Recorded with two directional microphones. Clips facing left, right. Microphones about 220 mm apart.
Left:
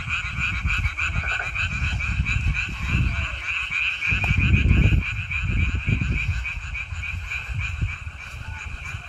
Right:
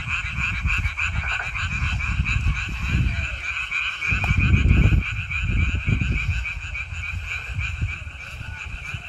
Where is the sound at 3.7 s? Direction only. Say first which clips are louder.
Right 1 dB; 50° right (ahead or behind).